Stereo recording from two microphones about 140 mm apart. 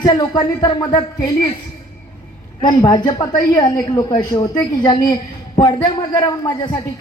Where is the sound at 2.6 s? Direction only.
25° left (ahead or behind).